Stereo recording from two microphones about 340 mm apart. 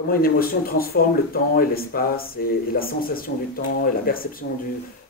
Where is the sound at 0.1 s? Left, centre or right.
Left.